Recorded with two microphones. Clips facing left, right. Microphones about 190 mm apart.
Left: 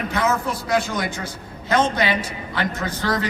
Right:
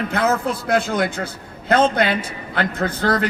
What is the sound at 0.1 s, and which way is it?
A man's voice, 60° right (ahead or behind).